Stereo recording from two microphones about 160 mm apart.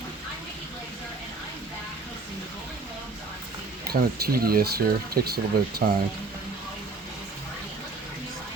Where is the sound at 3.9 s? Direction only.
70° right (ahead or behind).